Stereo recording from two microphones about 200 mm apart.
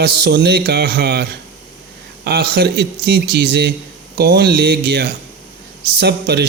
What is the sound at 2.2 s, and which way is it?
A man's voice, 50° right (ahead or behind).